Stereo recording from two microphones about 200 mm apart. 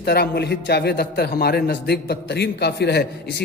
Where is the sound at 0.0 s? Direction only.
50° left (ahead or behind).